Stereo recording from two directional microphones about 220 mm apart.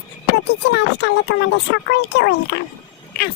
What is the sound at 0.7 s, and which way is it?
Speech, 50° left (ahead or behind).